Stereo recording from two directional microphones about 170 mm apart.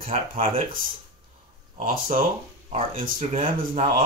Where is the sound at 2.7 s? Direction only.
35° right (ahead or behind).